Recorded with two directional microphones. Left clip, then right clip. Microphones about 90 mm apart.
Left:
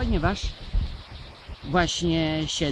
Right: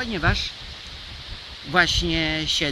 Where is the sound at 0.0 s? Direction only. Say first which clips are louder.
Right 3 dB; 20° right (ahead or behind).